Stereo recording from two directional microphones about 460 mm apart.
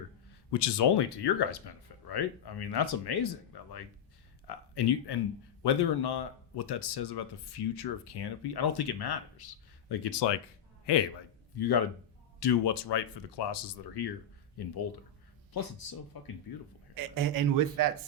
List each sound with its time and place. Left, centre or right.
0.5 s speech: left
11.5 s speech: left
16.1 s speech: left
16.9 s speech: right